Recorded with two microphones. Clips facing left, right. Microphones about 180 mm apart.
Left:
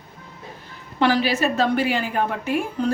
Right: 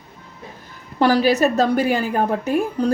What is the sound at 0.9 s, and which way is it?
A woman's voice, 40° right (ahead or behind).